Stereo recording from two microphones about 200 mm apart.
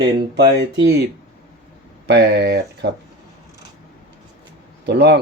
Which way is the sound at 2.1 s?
55° right (ahead or behind).